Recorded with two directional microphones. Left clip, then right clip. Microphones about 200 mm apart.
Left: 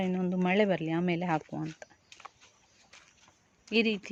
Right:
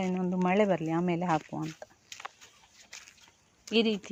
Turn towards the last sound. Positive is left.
turn(degrees=0)  # may be behind; listen again after turning